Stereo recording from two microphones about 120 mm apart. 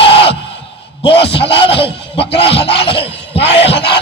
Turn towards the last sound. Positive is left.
turn(degrees=50)  # may be behind; listen again after turning